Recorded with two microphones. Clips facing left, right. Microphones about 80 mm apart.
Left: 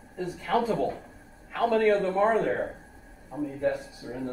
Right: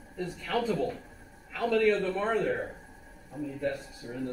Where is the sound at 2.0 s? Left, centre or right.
Left.